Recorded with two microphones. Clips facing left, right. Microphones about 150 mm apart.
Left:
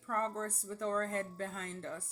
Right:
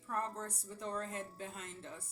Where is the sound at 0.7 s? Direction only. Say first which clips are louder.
Left 7 dB; 65° left (ahead or behind).